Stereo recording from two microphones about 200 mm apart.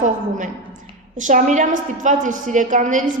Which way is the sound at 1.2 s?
40° right (ahead or behind).